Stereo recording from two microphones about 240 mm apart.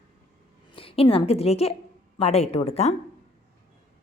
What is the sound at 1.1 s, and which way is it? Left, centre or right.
Speech, left.